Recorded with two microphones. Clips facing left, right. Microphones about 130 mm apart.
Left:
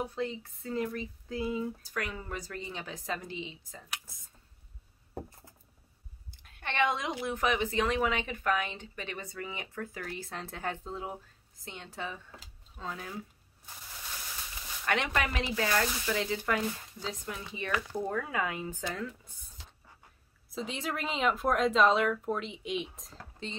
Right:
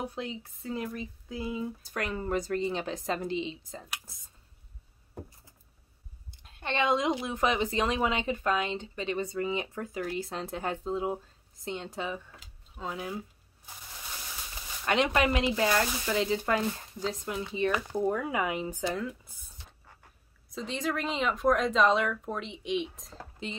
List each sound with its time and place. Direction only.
0.1 s speech: 15° right (ahead or behind)
2.3 s a woman's voice: 25° right (ahead or behind)
6.4 s a woman's voice: 25° right (ahead or behind)
14.9 s a woman's voice: 20° right (ahead or behind)
20.4 s speech: 5° left (ahead or behind)